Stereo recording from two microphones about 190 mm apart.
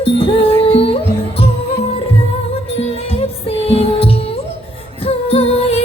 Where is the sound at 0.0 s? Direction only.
30° left (ahead or behind).